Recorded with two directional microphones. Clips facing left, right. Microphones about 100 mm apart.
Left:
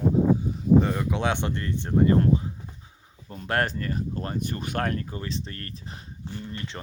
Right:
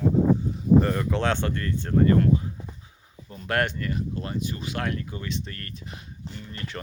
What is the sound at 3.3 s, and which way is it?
Speech, 35° left (ahead or behind).